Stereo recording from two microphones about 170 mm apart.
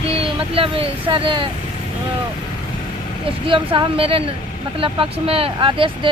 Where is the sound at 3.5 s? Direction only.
30° right (ahead or behind).